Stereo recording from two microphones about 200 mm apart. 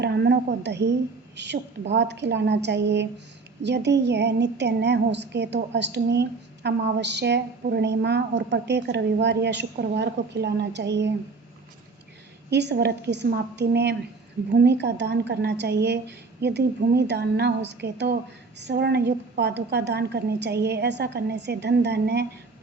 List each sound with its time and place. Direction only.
0.0 s a sound: 55° right (ahead or behind)
1.9 s a woman's voice: 60° right (ahead or behind)
12.5 s a woman's voice: 60° right (ahead or behind)